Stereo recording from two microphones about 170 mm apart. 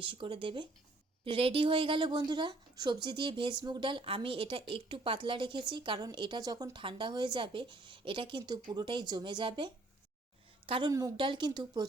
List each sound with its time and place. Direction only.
0.0 s a woman's voice: 30° right (ahead or behind)